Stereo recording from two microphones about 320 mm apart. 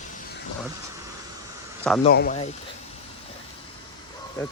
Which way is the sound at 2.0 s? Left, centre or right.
Left.